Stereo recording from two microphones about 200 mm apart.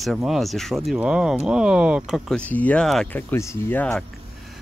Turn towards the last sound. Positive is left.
turn(degrees=10)  # may be behind; listen again after turning